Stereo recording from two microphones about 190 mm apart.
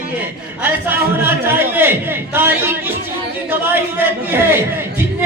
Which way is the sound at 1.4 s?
10° right (ahead or behind).